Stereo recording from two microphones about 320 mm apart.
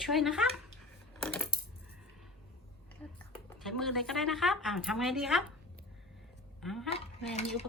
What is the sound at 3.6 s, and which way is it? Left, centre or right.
A woman's voice, centre.